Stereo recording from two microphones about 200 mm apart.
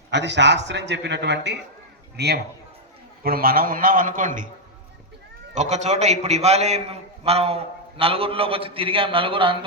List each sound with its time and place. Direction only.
0.1 s a man's voice: 60° right (ahead or behind); by 4.4 s 40° right (ahead or behind)
5.5 s a man's voice: 35° right (ahead or behind)